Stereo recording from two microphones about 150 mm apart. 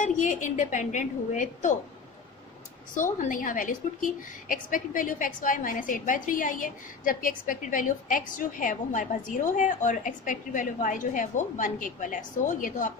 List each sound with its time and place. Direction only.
0.0 s a woman's voice: 55° left (ahead or behind)
2.9 s a woman's voice: 60° left (ahead or behind)